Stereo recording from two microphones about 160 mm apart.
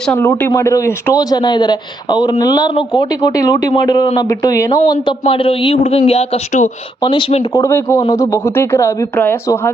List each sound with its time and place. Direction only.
0.2 s a man's voice: 10° left (ahead or behind)
5.2 s speech: 35° left (ahead or behind)
7.0 s speech: 30° left (ahead or behind)
7.5 s a man's voice: 15° left (ahead or behind)